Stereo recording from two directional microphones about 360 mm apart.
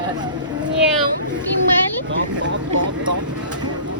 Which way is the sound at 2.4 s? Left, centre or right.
Right.